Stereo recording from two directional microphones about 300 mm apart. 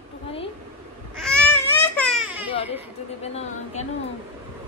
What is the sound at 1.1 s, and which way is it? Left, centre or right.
Baby cry, centre.